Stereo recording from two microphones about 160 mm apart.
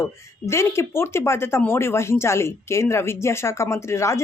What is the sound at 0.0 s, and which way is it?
Speech, 15° left (ahead or behind).